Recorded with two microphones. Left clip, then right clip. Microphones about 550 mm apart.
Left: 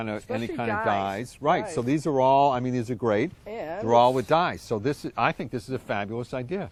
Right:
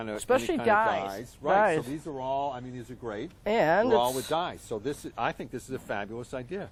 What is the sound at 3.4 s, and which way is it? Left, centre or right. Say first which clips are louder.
Speech: right 10 dB; right.